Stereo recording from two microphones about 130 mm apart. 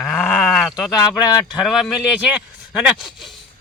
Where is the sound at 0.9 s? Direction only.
30° left (ahead or behind).